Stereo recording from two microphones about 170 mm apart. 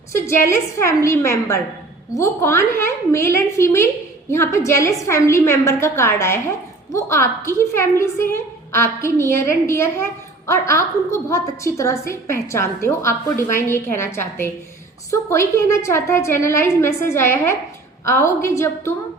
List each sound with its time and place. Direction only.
0.1 s a woman's voice: 15° left (ahead or behind)